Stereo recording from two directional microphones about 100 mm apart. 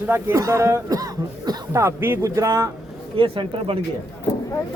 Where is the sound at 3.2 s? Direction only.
60° right (ahead or behind).